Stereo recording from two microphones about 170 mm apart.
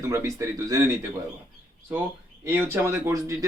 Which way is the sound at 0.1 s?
15° right (ahead or behind).